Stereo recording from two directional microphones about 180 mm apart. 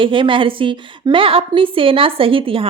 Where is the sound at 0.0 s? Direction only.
30° right (ahead or behind).